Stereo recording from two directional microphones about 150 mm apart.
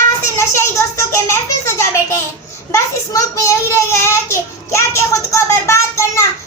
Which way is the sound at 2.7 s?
20° left (ahead or behind).